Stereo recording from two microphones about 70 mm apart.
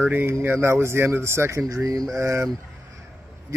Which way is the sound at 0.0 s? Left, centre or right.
Right.